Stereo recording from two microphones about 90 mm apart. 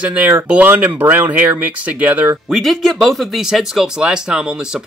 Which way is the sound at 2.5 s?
Centre (ahead or behind).